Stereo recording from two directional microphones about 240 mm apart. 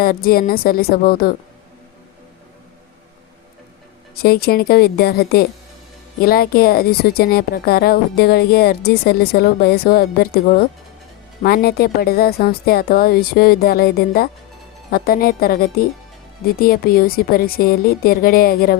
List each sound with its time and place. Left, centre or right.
0.0 s a woman's voice: left
4.2 s a woman's voice: left